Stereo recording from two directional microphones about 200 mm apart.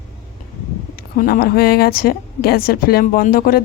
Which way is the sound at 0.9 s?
50° left (ahead or behind).